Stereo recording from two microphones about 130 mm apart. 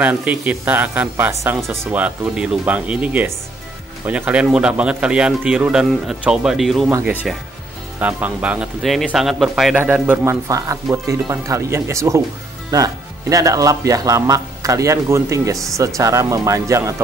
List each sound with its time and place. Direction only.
0.0 s speech: 10° right (ahead or behind)
9.8 s speech: 10° right (ahead or behind)
10.5 s speech: 25° right (ahead or behind)